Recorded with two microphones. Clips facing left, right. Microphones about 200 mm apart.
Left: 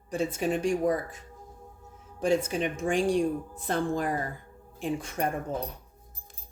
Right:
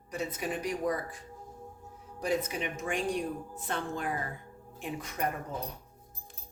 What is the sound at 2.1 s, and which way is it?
A woman's voice, 25° left (ahead or behind).